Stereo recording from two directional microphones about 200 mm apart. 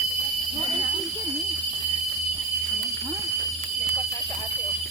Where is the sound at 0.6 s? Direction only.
25° right (ahead or behind).